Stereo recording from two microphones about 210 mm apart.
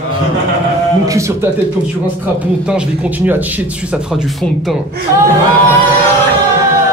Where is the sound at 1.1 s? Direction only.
15° right (ahead or behind).